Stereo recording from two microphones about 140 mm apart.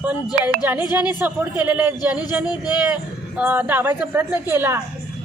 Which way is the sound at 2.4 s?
30° left (ahead or behind).